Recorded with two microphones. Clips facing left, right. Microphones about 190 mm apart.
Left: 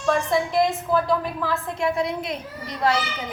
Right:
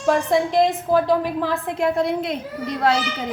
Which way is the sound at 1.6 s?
55° right (ahead or behind).